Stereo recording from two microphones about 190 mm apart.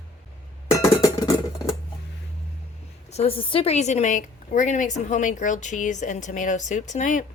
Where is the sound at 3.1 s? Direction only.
30° left (ahead or behind).